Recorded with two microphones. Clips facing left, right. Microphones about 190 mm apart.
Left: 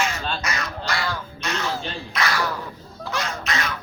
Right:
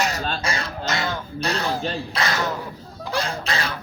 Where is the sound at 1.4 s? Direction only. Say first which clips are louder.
Right 5 dB; 35° right (ahead or behind).